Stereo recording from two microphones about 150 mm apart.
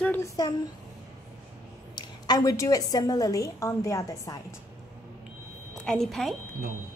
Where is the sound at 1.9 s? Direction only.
25° left (ahead or behind).